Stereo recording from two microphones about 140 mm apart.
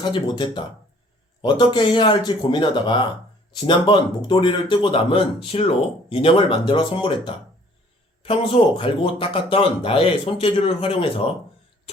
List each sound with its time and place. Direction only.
0.0 s a man's voice: 35° left (ahead or behind)